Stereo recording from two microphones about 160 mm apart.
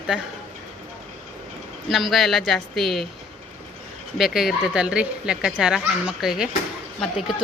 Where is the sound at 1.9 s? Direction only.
Centre (ahead or behind).